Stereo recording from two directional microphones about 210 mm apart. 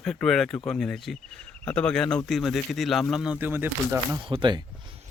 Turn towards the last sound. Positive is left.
turn(degrees=-20)  # may be behind; listen again after turning